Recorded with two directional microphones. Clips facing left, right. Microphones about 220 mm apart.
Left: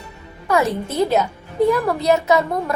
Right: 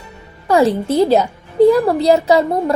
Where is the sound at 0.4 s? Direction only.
30° right (ahead or behind).